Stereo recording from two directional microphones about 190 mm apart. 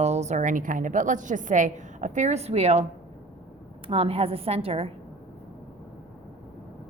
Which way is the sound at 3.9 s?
30° right (ahead or behind).